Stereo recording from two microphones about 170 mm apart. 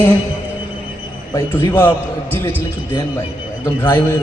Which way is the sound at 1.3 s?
15° left (ahead or behind).